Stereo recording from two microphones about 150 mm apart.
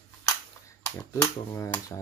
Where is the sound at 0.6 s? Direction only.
20° left (ahead or behind).